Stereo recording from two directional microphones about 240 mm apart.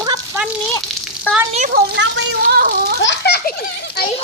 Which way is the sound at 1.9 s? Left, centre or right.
Right.